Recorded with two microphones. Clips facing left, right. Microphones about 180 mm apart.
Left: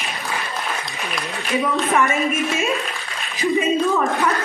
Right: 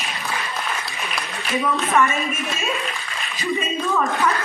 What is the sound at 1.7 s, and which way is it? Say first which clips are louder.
Speech: even; 15° left (ahead or behind).